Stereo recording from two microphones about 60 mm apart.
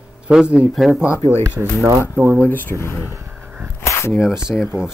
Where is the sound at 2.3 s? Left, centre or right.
Left.